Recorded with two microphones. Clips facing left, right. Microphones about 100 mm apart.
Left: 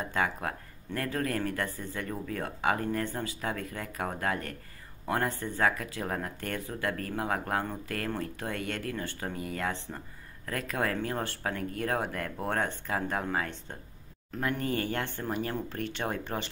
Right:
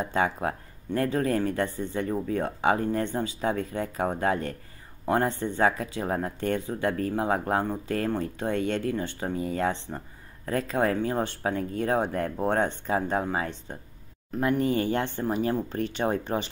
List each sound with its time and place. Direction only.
0.0 s speech: 25° right (ahead or behind)